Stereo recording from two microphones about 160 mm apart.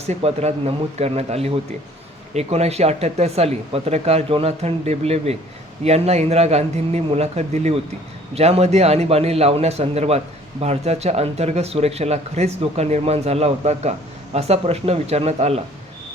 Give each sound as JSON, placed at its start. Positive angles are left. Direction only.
{"t": 0.0, "sound": "a man's voice", "side_deg": -40}